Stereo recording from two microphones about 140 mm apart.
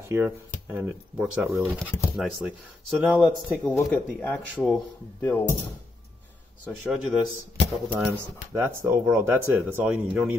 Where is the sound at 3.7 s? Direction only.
15° left (ahead or behind).